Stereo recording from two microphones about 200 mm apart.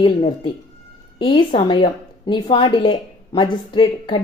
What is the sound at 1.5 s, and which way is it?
A woman's voice, 25° left (ahead or behind).